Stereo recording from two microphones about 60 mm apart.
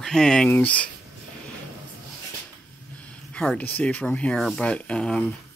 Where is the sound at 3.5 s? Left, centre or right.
Left.